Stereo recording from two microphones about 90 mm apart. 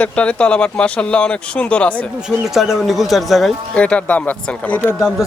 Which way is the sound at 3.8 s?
15° left (ahead or behind).